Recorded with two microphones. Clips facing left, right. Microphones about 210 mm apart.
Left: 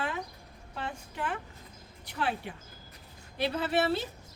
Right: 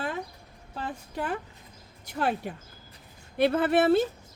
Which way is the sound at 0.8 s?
40° right (ahead or behind).